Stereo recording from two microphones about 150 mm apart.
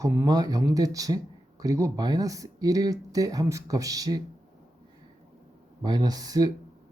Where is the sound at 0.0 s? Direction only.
15° right (ahead or behind).